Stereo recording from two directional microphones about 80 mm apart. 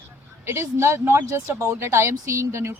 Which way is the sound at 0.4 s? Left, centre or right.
Right.